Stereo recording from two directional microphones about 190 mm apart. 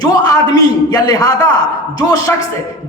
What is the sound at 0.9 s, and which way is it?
A man's voice, 20° left (ahead or behind).